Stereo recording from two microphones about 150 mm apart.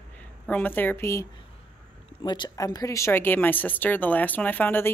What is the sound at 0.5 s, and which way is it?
Speech, 10° left (ahead or behind).